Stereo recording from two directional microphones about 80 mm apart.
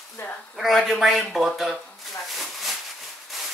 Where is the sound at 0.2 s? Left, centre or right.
Left.